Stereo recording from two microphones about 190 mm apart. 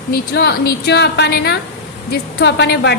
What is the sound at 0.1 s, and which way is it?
A woman's voice, 60° left (ahead or behind).